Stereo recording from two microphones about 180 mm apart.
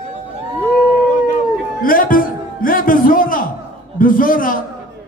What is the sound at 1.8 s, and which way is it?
A man's voice, 50° left (ahead or behind).